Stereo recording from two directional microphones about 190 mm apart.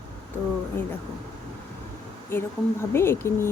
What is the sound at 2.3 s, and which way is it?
Speech, 10° left (ahead or behind).